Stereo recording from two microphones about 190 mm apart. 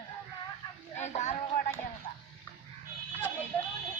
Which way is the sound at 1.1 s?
35° left (ahead or behind).